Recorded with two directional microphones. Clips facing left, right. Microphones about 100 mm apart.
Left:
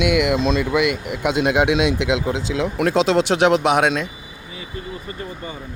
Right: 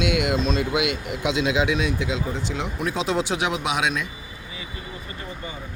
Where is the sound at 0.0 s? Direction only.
60° left (ahead or behind).